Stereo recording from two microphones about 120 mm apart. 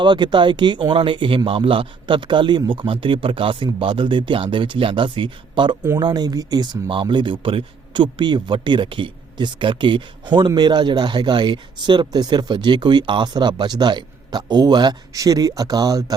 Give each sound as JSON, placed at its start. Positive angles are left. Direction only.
{"t": 0.0, "sound": "speech", "side_deg": -40}